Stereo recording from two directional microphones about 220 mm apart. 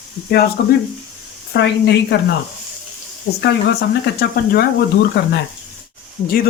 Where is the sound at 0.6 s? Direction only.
45° left (ahead or behind).